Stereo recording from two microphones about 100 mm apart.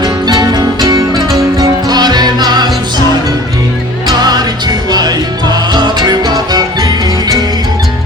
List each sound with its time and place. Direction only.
0.0 s music: 45° right (ahead or behind)
4.9 s music: 45° right (ahead or behind)